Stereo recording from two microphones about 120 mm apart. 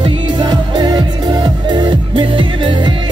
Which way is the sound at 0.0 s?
35° right (ahead or behind).